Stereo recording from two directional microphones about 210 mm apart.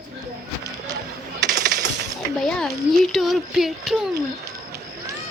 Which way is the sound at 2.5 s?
Centre (ahead or behind).